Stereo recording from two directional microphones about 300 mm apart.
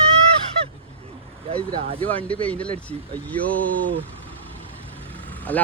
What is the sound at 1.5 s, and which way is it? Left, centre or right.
Speech, centre.